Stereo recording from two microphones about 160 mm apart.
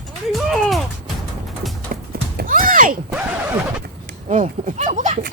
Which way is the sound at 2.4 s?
55° right (ahead or behind).